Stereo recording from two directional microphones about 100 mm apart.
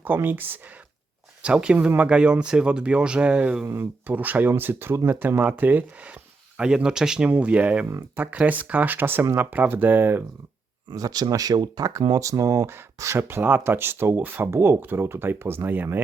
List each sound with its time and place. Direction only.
0.0 s speech: 20° right (ahead or behind)
3.7 s speech: 20° right (ahead or behind)
7.9 s speech: 30° right (ahead or behind)
8.2 s speech: 15° right (ahead or behind)
10.9 s speech: 40° right (ahead or behind); by 16.0 s 20° right (ahead or behind)